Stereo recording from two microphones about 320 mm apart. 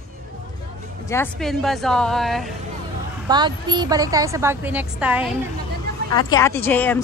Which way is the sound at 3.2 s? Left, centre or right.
Centre.